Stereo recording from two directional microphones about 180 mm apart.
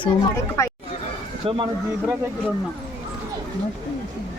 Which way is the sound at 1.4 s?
30° right (ahead or behind).